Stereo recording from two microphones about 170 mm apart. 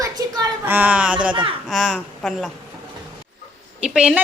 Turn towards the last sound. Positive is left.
turn(degrees=-5)  # may be behind; listen again after turning